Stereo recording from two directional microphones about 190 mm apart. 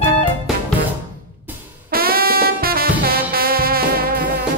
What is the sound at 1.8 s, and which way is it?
Music, 50° right (ahead or behind).